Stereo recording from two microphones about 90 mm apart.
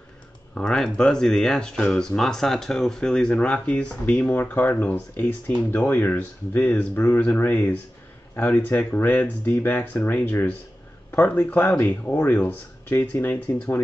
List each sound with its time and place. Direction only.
0.6 s speech: 5° left (ahead or behind)
4.3 s speech: 20° left (ahead or behind)
7.0 s speech: 30° left (ahead or behind)
11.3 s speech: 30° left (ahead or behind)
12.0 s speech: 25° left (ahead or behind)